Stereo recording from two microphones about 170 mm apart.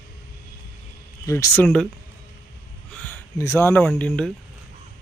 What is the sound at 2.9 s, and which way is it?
Speech, 10° left (ahead or behind).